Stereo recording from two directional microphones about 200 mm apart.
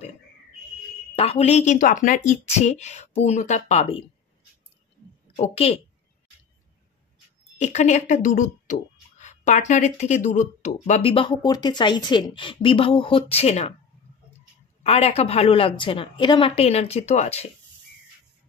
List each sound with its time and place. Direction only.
1.1 s speech: 30° left (ahead or behind)
5.3 s a woman's voice: 30° left (ahead or behind)
7.5 s speech: 35° left (ahead or behind)
14.8 s speech: 30° left (ahead or behind)